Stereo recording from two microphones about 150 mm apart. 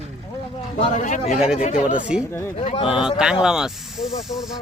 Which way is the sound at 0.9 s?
55° left (ahead or behind).